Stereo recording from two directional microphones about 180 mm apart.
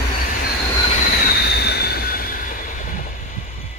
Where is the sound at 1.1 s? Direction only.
55° left (ahead or behind).